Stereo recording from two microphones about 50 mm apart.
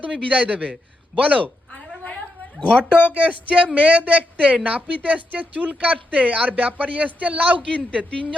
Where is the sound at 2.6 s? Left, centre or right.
Left.